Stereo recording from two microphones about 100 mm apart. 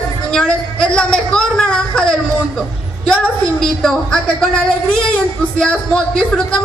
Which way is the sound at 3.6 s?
5° left (ahead or behind).